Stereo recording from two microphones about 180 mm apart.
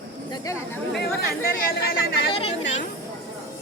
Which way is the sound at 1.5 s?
55° left (ahead or behind).